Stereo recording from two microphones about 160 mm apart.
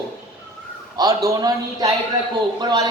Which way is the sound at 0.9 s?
25° right (ahead or behind).